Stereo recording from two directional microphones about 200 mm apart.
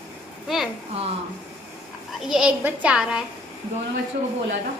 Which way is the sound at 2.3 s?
5° right (ahead or behind).